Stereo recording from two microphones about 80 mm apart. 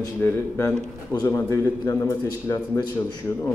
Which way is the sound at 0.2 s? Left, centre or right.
Left.